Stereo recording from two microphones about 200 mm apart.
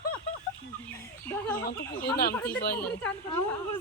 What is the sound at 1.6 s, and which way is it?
Speech, 50° left (ahead or behind).